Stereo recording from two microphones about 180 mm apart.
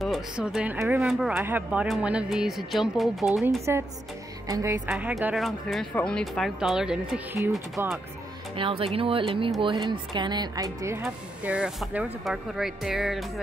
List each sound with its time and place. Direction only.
0.0 s speech: centre (ahead or behind)
4.5 s speech: 20° right (ahead or behind)
4.9 s speech: 5° right (ahead or behind)
7.8 s speech: 15° right (ahead or behind)
8.5 s speech: 30° right (ahead or behind); by 13.3 s centre (ahead or behind)